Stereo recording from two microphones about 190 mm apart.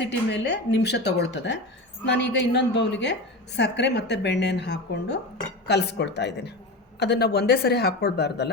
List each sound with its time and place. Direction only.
0.0 s a woman's voice: 65° left (ahead or behind)